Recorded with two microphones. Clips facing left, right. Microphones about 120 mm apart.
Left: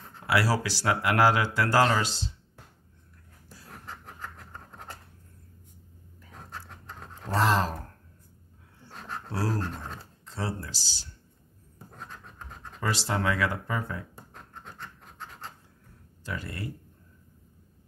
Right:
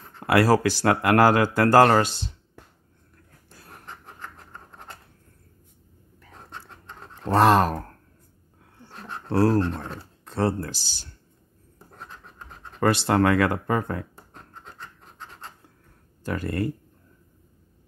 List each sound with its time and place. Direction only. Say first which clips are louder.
0.3 s speech: right 7 dB; 55° right (ahead or behind)
7.3 s speech: right 7 dB; 60° right (ahead or behind)
8.9 s a sound: right 1 dB; centre (ahead or behind)
9.3 s speech: right 11 dB; 60° right (ahead or behind)
12.0 s scratch: right 1 dB; 35° right (ahead or behind)
12.8 s speech: right 8 dB; 60° right (ahead or behind)
14.3 s a sound: right 1 dB; 30° right (ahead or behind)
16.3 s speech: right 9 dB; 50° right (ahead or behind)